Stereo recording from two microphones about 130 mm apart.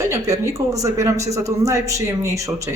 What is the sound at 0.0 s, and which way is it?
A man's voice, 25° right (ahead or behind).